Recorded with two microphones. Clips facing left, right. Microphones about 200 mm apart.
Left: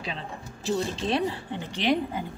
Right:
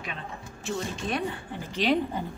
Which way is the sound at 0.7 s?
35° left (ahead or behind).